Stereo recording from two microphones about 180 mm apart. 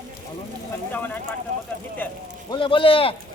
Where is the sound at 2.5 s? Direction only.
30° left (ahead or behind).